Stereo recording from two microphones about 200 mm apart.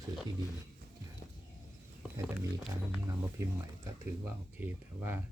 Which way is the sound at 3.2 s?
15° right (ahead or behind).